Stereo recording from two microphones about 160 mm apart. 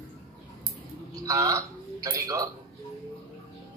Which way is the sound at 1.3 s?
20° right (ahead or behind).